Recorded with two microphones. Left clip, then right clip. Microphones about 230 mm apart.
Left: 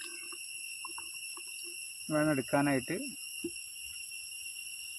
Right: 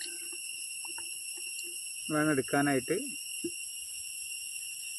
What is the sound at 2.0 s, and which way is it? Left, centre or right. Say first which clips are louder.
Speech: right 1 dB; left.